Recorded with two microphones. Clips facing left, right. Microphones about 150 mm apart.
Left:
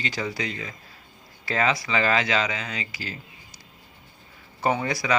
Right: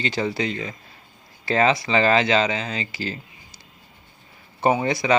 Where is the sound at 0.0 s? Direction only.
25° right (ahead or behind).